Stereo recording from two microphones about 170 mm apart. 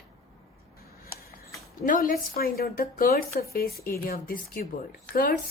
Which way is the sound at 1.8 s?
50° left (ahead or behind).